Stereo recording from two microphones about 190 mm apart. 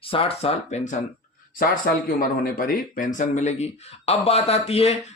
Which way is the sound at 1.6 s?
50° left (ahead or behind).